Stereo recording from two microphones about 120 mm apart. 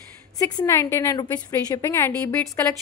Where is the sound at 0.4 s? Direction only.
25° left (ahead or behind).